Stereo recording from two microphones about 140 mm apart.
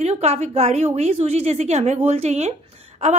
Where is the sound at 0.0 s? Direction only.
50° right (ahead or behind).